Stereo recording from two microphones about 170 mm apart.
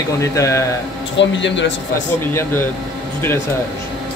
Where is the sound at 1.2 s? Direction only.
90° left.